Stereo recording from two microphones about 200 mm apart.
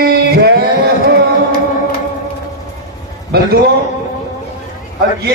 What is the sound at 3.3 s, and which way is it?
Speech, 50° right (ahead or behind).